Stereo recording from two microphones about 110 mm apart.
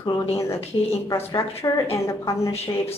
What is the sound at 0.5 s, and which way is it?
Speech, 65° left (ahead or behind).